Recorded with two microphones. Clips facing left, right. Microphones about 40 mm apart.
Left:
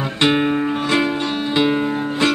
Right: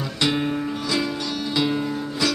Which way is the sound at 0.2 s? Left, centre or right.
Left.